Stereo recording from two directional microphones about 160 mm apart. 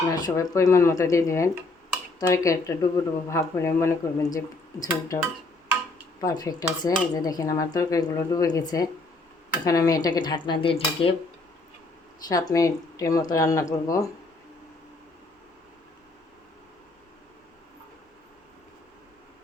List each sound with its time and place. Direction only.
0.1 s speech: 20° left (ahead or behind)
6.2 s speech: 25° left (ahead or behind)
12.3 s speech: 20° left (ahead or behind)